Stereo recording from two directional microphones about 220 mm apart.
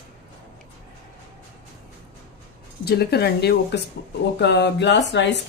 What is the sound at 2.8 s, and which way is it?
Speech, 45° left (ahead or behind).